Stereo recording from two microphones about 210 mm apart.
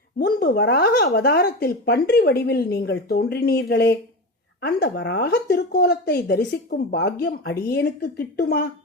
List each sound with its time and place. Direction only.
0.2 s a woman's voice: 45° left (ahead or behind)